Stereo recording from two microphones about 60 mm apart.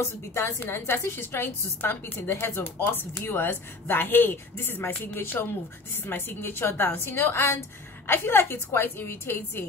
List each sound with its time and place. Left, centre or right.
0.0 s a woman's voice: left